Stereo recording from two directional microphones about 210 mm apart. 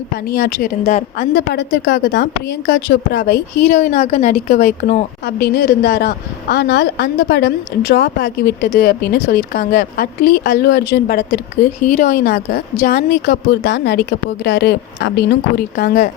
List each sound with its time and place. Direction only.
0.3 s a woman's voice: 50° left (ahead or behind)
3.7 s a woman's voice: 30° left (ahead or behind)
5.2 s a woman's voice: 50° left (ahead or behind)